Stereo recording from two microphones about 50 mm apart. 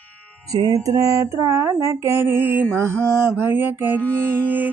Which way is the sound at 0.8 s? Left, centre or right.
Right.